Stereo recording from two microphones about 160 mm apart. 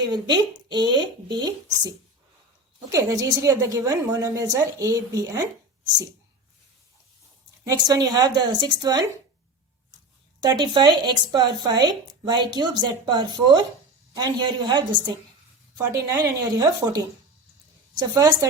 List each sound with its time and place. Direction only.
0.0 s speech: 25° right (ahead or behind)
2.9 s speech: 20° right (ahead or behind)
7.6 s speech: 25° right (ahead or behind)
10.4 s speech: 25° right (ahead or behind)
18.1 s speech: 20° right (ahead or behind)